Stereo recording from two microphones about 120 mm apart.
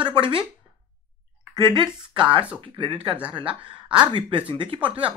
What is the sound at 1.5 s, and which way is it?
Speech, 40° right (ahead or behind).